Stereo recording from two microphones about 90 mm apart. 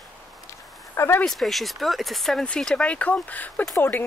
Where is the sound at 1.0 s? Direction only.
25° left (ahead or behind).